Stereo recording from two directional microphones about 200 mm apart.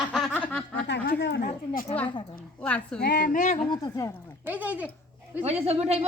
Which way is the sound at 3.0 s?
50° left (ahead or behind).